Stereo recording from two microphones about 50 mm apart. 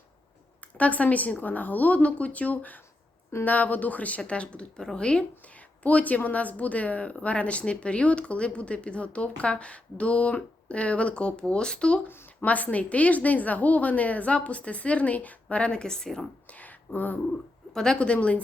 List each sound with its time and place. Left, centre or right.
0.8 s a woman's voice: left
5.8 s a woman's voice: left
12.5 s a woman's voice: left; by 16.2 s centre
16.5 s a sound: left
17.7 s a woman's voice: centre
18.1 s a woman's voice: left